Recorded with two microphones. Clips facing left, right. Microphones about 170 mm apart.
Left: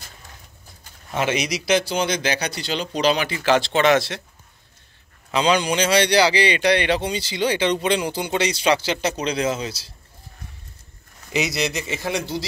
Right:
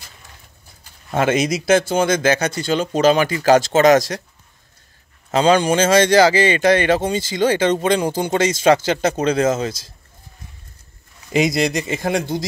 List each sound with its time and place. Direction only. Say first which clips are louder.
1.1 s speech: right 5 dB; 50° right (ahead or behind)
5.3 s speech: right 5 dB; 50° right (ahead or behind)
11.3 s speech: right 6 dB; 45° right (ahead or behind)